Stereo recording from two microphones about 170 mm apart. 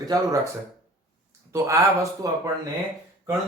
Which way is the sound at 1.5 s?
20° right (ahead or behind).